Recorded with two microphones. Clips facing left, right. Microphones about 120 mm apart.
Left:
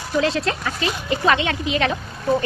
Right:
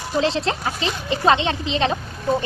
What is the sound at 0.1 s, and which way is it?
Speech, 25° right (ahead or behind).